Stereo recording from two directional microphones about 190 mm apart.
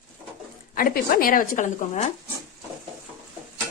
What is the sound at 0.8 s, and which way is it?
Speech, 50° left (ahead or behind).